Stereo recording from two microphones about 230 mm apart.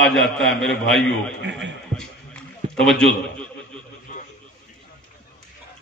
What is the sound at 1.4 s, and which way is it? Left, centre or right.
Speech, right.